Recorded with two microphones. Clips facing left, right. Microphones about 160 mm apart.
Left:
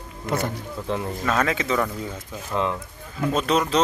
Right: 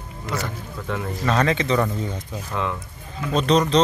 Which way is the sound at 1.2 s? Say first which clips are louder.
Right 3 dB; 5° left (ahead or behind).